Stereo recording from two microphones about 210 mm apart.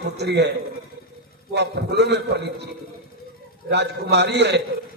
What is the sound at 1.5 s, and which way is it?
Speech, 55° right (ahead or behind).